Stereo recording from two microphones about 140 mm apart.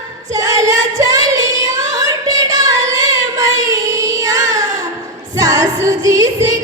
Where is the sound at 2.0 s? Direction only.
25° right (ahead or behind).